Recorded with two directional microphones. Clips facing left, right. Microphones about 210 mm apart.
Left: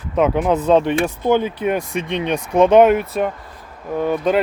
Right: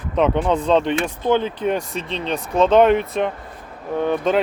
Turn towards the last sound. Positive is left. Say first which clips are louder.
# left 1 dB
turn(degrees=5)  # may be behind; listen again after turning